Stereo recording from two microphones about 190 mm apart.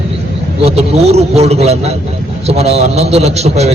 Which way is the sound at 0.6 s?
35° right (ahead or behind).